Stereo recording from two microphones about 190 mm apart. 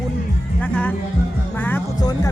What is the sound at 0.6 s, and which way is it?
Speech, 5° left (ahead or behind).